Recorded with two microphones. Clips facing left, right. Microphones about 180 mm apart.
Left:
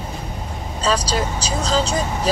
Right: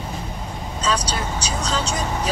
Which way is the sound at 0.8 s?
35° left (ahead or behind).